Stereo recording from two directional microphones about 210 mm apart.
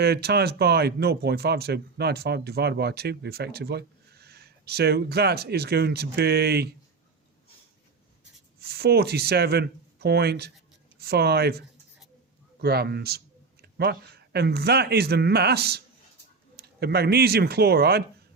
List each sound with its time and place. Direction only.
0.0 s speech: 50° right (ahead or behind)
8.2 s speech: 50° right (ahead or behind)
12.6 s a sound: 50° right (ahead or behind)
14.3 s speech: 50° right (ahead or behind)